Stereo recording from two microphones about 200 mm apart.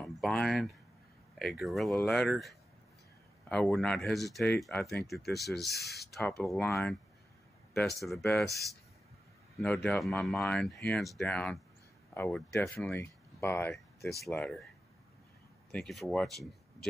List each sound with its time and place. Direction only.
0.0 s speech: centre (ahead or behind)
5.7 s speech: 55° left (ahead or behind)
6.1 s speech: centre (ahead or behind)
8.2 s speech: 5° left (ahead or behind)
9.6 s speech: 5° left (ahead or behind)
15.7 s speech: centre (ahead or behind)